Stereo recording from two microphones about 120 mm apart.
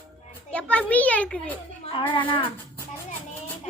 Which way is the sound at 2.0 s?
40° left (ahead or behind).